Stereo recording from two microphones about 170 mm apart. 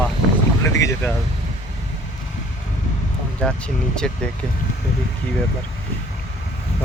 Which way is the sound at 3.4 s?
5° left (ahead or behind).